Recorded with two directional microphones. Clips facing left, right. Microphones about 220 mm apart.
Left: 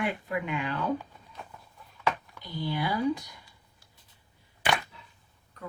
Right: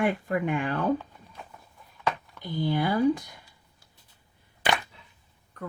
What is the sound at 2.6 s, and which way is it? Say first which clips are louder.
Speech: right 5 dB; 50° right (ahead or behind).